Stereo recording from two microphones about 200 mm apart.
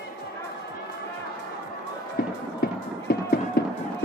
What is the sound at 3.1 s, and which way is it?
Music, 45° left (ahead or behind).